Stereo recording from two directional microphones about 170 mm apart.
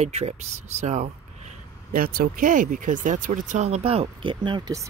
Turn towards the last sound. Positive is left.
turn(degrees=-25)  # may be behind; listen again after turning